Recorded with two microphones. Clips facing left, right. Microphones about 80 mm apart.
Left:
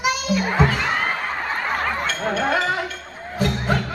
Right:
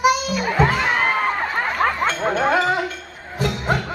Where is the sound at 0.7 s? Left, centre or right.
Right.